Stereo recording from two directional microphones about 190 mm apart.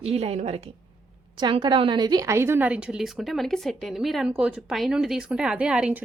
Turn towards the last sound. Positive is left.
turn(degrees=-5)  # may be behind; listen again after turning